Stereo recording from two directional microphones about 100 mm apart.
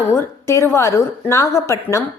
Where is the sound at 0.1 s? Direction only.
30° left (ahead or behind).